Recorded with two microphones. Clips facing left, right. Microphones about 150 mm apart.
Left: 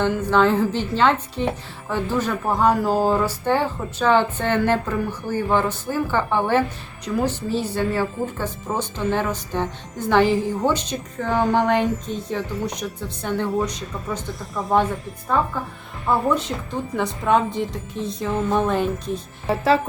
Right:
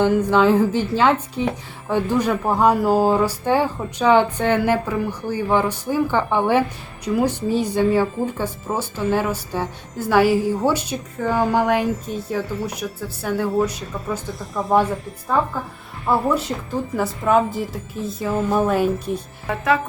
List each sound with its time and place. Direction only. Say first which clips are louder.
0.0 s speech: right 3 dB; 10° right (ahead or behind)
16.1 s a woman's voice: right 1 dB; 5° right (ahead or behind)
19.5 s speech: left 2 dB; 30° left (ahead or behind)